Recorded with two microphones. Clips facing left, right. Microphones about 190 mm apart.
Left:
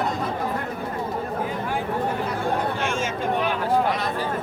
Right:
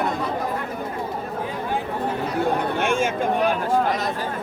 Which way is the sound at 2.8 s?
55° right (ahead or behind).